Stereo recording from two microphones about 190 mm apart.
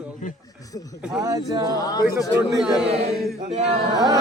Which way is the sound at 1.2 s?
20° right (ahead or behind).